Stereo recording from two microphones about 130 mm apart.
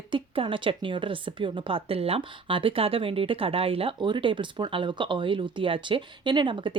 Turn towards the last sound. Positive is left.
turn(degrees=-40)  # may be behind; listen again after turning